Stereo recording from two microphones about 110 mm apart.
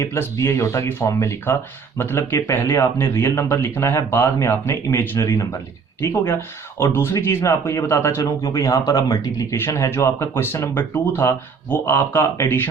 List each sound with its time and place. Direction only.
0.0 s speech: 25° left (ahead or behind)